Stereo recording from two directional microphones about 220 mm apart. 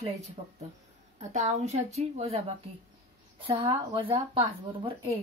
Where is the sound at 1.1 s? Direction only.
30° right (ahead or behind).